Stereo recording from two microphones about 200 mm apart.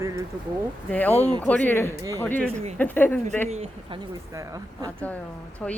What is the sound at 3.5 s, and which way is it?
Speech, 30° right (ahead or behind).